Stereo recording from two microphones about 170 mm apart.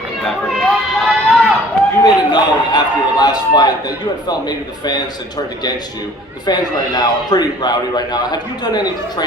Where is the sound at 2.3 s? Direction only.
25° left (ahead or behind).